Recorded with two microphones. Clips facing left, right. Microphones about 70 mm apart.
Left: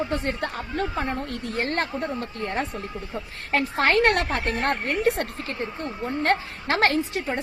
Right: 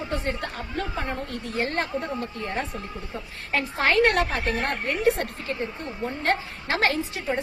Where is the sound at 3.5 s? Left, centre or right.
Left.